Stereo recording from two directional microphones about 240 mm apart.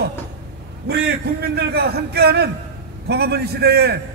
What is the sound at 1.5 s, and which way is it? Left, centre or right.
A man's voice, right.